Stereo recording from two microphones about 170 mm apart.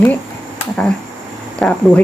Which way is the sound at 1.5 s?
5° left (ahead or behind).